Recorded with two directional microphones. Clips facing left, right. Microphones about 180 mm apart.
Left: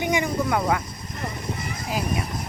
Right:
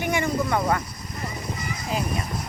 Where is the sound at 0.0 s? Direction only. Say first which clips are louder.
Left 1 dB; 15° left (ahead or behind).